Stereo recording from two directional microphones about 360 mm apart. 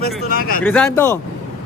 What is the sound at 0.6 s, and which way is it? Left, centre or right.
Speech, centre.